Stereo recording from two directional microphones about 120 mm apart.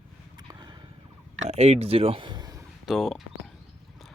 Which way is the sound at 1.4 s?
65° right (ahead or behind).